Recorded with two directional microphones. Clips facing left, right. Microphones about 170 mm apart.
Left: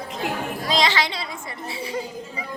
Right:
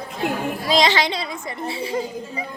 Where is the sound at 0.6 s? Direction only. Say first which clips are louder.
Right 4 dB; 15° right (ahead or behind).